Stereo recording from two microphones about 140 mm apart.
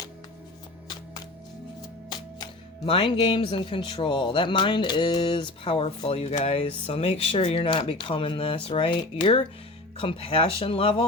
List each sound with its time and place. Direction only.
2.8 s speech: 40° left (ahead or behind)